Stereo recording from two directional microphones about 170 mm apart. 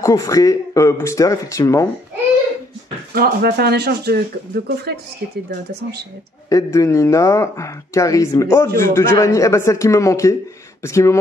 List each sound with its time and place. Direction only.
0.0 s speech: 20° left (ahead or behind)
3.2 s speech: 65° right (ahead or behind)
6.5 s speech: 15° left (ahead or behind)